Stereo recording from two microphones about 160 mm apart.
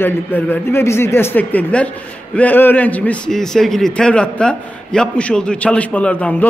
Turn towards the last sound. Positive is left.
turn(degrees=10)  # may be behind; listen again after turning